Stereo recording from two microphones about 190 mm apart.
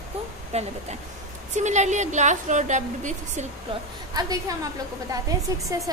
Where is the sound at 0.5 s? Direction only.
35° right (ahead or behind).